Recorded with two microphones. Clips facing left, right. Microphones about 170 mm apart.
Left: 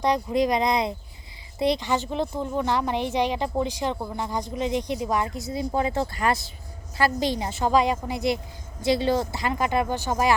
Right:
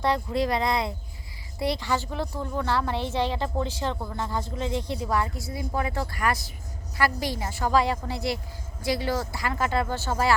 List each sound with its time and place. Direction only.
0.0 s a woman's voice: 15° left (ahead or behind)